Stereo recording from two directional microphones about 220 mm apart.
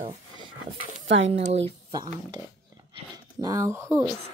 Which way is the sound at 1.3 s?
30° right (ahead or behind).